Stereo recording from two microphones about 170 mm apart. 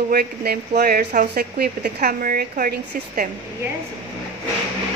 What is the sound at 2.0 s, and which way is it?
Speech, 60° right (ahead or behind).